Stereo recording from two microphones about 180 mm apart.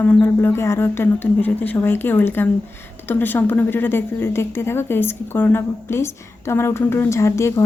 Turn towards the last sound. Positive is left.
turn(degrees=15)  # may be behind; listen again after turning